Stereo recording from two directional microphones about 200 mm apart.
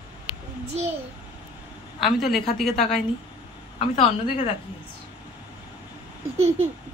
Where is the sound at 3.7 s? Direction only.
30° left (ahead or behind).